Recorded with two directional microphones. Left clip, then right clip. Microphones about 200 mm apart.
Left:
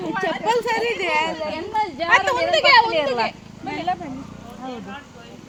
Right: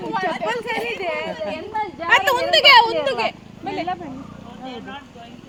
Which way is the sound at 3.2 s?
30° right (ahead or behind).